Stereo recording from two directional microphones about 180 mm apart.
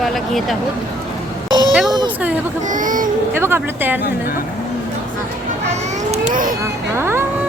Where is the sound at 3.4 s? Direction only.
15° right (ahead or behind).